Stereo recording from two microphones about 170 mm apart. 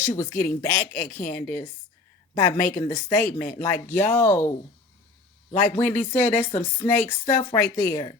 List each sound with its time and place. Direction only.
0.0 s speech: 15° left (ahead or behind)
5.8 s speech: 10° left (ahead or behind)